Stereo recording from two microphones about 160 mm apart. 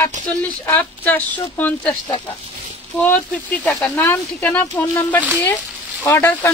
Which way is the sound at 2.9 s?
10° left (ahead or behind).